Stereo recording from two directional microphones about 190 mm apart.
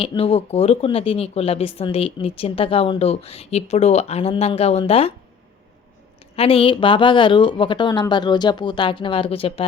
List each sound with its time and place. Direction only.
0.0 s speech: 30° left (ahead or behind)
6.3 s a woman's voice: 30° left (ahead or behind)